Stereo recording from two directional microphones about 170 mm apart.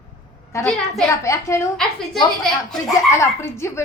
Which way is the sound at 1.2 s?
20° left (ahead or behind).